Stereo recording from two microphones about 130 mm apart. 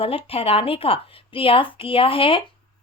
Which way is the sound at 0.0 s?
50° left (ahead or behind).